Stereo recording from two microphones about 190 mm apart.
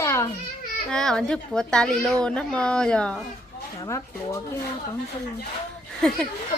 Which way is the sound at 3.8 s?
15° left (ahead or behind).